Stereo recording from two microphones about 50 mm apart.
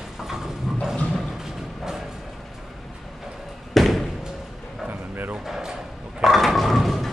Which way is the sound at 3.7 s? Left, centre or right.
Centre.